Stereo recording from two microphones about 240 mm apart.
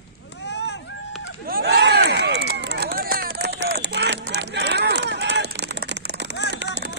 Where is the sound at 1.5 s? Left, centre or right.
Right.